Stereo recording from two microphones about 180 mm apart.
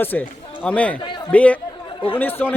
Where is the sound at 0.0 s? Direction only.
10° left (ahead or behind).